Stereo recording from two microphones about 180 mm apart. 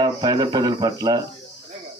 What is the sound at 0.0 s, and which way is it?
A man's voice, 25° right (ahead or behind).